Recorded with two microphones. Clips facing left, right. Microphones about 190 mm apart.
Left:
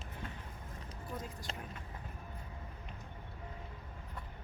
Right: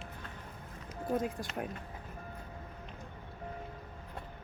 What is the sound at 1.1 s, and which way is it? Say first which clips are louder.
Speech: right 12 dB; 60° right (ahead or behind).